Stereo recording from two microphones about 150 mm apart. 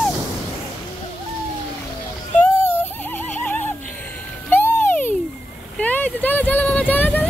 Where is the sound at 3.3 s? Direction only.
10° left (ahead or behind).